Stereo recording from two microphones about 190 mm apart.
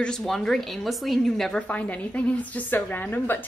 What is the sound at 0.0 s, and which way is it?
A woman's voice, centre (ahead or behind).